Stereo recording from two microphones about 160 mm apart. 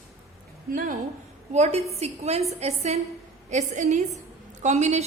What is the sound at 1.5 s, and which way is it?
A woman's voice, 45° right (ahead or behind).